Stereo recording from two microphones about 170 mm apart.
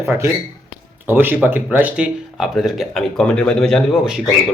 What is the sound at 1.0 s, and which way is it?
Speech, 10° right (ahead or behind).